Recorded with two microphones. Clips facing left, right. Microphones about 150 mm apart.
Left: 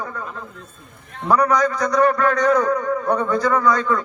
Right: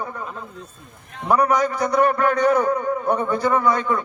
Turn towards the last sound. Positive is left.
turn(degrees=-20)  # may be behind; listen again after turning